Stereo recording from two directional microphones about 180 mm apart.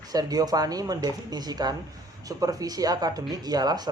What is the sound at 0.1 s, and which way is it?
A man's voice, 20° right (ahead or behind).